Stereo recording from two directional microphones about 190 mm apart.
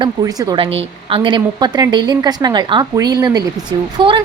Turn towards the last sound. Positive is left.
turn(degrees=-25)  # may be behind; listen again after turning